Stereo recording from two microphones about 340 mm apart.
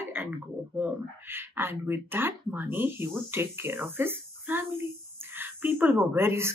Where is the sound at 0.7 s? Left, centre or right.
Centre.